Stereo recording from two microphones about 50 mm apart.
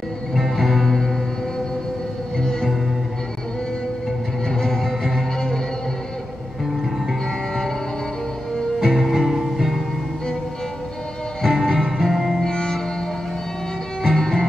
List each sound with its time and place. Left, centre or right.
0.3 s music: centre
2.3 s music: centre
4.5 s music: centre
8.7 s music: centre
11.4 s music: centre
12.4 s music: centre
14.0 s music: centre